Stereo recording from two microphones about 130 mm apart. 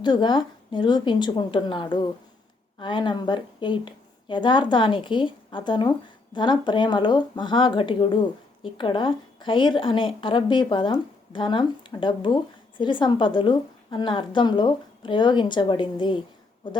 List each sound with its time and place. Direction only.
0.0 s speech: 35° left (ahead or behind)